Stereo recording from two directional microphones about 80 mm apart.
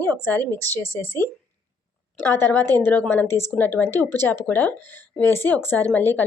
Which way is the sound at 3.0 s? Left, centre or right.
Left.